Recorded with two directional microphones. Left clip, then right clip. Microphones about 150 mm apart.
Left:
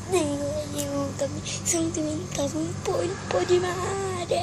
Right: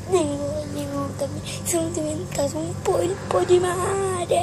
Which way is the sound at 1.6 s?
20° right (ahead or behind).